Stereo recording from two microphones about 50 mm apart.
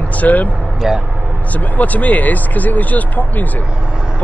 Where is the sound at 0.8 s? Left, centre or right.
Centre.